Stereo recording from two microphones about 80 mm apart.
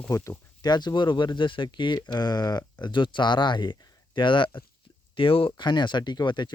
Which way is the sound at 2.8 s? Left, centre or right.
Left.